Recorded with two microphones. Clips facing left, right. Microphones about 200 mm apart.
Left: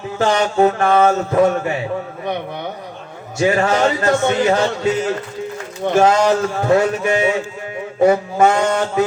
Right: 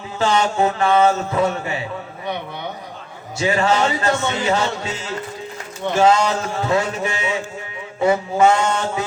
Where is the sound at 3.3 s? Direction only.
50° left (ahead or behind).